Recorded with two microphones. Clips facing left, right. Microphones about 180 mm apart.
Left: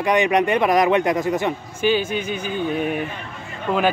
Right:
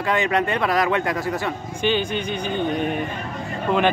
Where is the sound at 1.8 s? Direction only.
5° left (ahead or behind).